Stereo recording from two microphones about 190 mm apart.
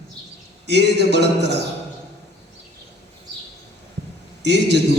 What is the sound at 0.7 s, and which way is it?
Speech, 65° right (ahead or behind).